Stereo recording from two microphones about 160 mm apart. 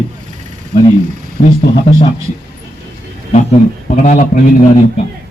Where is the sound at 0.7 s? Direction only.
55° left (ahead or behind).